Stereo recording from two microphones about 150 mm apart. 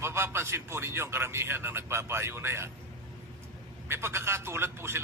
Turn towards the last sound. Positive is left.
turn(degrees=-15)  # may be behind; listen again after turning